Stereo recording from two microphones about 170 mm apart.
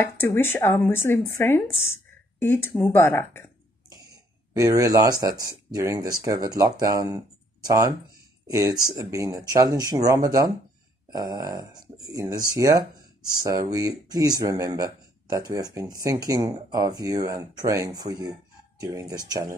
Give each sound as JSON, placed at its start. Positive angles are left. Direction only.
{"t": 0.0, "sound": "speech", "side_deg": 10}
{"t": 4.1, "sound": "speech", "side_deg": -20}